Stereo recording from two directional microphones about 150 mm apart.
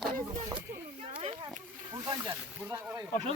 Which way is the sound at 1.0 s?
40° right (ahead or behind).